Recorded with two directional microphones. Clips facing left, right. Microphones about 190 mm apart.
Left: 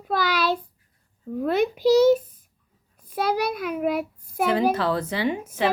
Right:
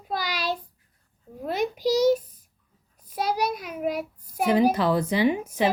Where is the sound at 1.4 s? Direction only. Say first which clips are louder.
Left 5 dB; 60° left (ahead or behind).